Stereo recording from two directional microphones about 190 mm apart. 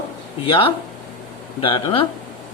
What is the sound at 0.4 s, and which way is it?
Speech, 25° left (ahead or behind).